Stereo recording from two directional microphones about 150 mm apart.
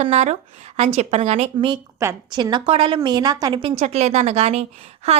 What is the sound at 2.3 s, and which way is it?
A woman's voice, 30° right (ahead or behind).